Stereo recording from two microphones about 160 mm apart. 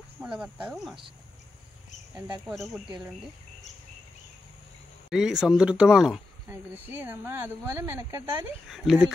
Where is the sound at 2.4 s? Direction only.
Centre (ahead or behind).